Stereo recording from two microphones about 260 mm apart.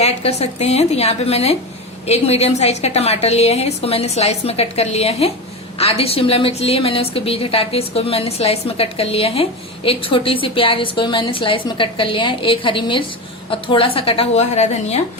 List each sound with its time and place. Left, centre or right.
0.0 s a woman's voice: left